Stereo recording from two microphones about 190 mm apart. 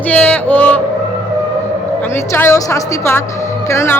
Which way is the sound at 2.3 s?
15° left (ahead or behind).